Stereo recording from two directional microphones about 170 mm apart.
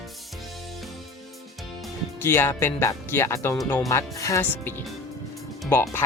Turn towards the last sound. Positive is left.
turn(degrees=15)  # may be behind; listen again after turning